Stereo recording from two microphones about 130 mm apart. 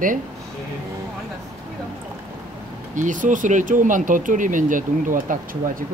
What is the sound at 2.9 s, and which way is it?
Speech, 80° right.